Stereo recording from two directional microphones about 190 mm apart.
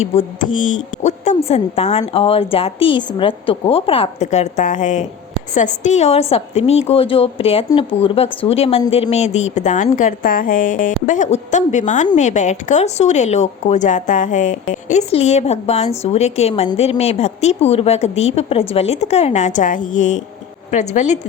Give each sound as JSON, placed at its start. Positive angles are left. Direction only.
{"t": 0.0, "sound": "speech", "side_deg": 35}